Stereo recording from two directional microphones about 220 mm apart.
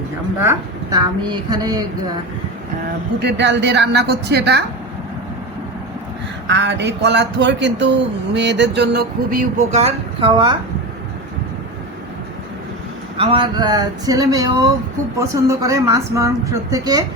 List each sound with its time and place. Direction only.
0.3 s speech: 15° right (ahead or behind)
3.2 s speech: 50° right (ahead or behind)
6.5 s speech: 50° right (ahead or behind); by 10.6 s 20° right (ahead or behind)
13.1 s speech: 25° right (ahead or behind)